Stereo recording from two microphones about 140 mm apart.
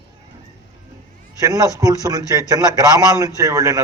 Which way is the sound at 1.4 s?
25° right (ahead or behind).